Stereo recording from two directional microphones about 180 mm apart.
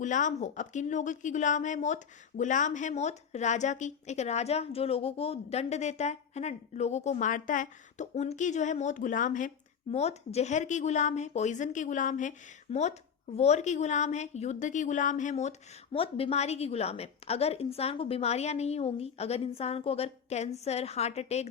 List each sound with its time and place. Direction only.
0.0 s a woman's voice: 45° left (ahead or behind)